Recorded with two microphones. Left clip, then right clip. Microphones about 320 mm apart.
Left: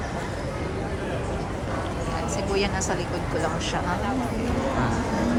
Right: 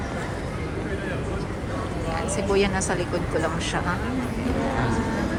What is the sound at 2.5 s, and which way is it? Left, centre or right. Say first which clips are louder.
Speech: right 3 dB; centre.